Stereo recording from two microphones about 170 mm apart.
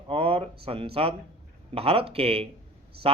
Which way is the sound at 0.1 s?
35° right (ahead or behind).